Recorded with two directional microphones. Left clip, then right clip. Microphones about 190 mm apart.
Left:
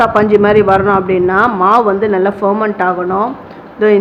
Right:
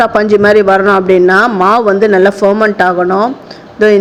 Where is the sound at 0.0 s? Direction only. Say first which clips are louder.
Right 1 dB; 30° right (ahead or behind).